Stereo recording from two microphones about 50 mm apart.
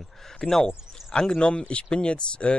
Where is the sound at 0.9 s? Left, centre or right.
Centre.